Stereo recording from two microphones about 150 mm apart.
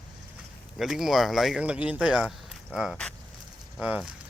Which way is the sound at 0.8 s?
Centre (ahead or behind).